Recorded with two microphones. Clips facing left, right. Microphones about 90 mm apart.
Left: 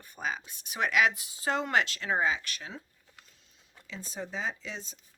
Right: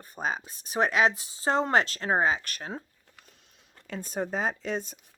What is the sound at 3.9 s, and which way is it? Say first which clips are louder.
Speech: right 7 dB; 50° right (ahead or behind).